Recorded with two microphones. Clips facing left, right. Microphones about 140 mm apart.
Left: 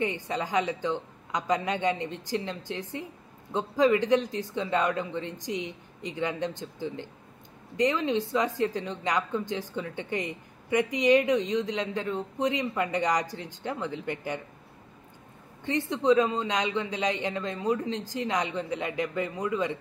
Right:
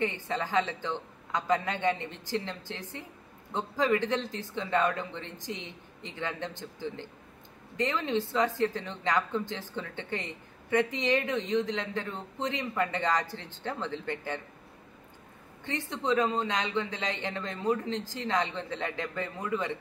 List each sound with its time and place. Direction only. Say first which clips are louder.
0.0 s speech: left 2 dB; 15° left (ahead or behind)
15.9 s speech: left 4 dB; 20° left (ahead or behind)